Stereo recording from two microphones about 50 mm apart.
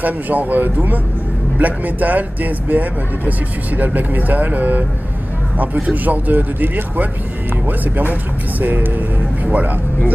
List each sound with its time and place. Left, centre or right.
0.0 s speech: right